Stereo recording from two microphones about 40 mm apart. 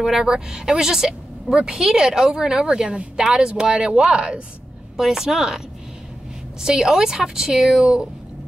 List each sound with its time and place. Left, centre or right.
0.0 s a woman's voice: centre; by 4.4 s right
4.9 s a woman's voice: centre
6.6 s a woman's voice: centre
7.8 s a woman's voice: right